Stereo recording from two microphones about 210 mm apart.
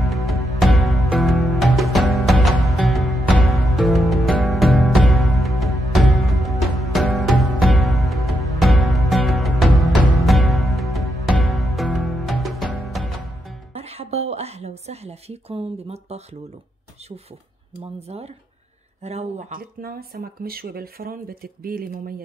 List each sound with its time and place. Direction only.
0.0 s music: centre (ahead or behind)
13.7 s a sound: 30° right (ahead or behind)
17.7 s speech: 30° right (ahead or behind)
19.8 s speech: 45° right (ahead or behind)